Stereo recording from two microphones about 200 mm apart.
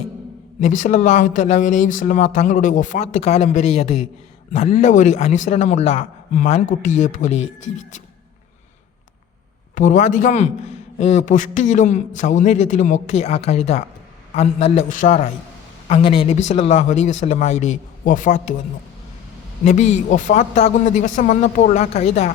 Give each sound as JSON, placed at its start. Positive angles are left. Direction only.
{"t": 0.6, "sound": "speech", "side_deg": 40}
{"t": 9.7, "sound": "speech", "side_deg": 40}
{"t": 19.6, "sound": "speech", "side_deg": 35}